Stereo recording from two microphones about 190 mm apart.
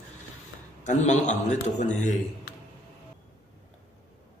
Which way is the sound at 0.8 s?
40° left (ahead or behind).